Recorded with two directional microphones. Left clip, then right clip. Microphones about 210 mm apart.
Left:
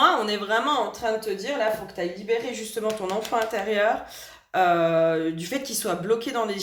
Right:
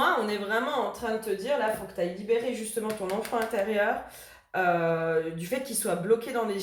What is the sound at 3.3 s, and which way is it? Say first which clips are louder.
Speech: left 3 dB; 45° left (ahead or behind).